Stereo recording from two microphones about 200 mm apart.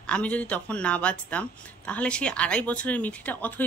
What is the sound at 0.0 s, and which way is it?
Speech, 5° left (ahead or behind).